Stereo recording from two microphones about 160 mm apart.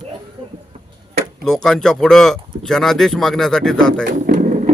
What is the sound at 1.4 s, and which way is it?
Speech, centre (ahead or behind).